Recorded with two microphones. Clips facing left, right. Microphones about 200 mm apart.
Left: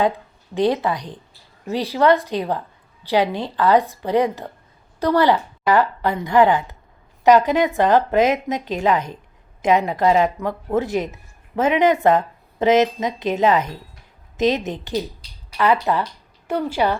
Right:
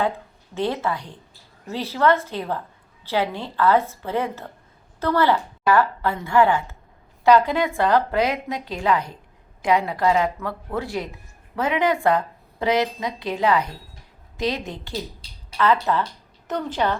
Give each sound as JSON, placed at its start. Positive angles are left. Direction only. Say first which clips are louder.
{"t": 0.5, "sound": "a woman's voice", "louder": "left 5 dB", "side_deg": 15}